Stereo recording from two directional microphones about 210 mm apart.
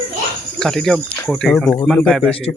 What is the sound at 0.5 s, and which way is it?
Speech, centre (ahead or behind).